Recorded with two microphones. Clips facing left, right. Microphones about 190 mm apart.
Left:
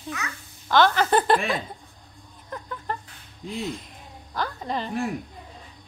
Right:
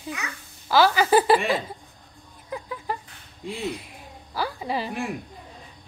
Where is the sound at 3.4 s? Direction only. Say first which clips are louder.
Right 1 dB; centre (ahead or behind).